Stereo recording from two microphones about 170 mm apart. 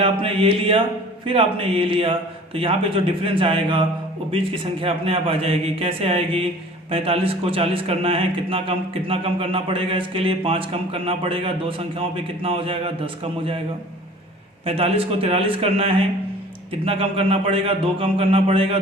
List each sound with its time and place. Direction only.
0.0 s a man's voice: 30° right (ahead or behind)
14.6 s a man's voice: 35° right (ahead or behind)